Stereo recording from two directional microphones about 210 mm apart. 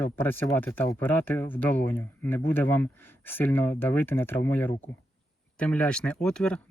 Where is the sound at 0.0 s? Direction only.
10° left (ahead or behind).